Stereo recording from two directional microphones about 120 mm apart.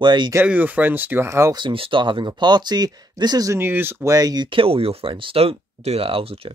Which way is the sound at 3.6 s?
20° right (ahead or behind).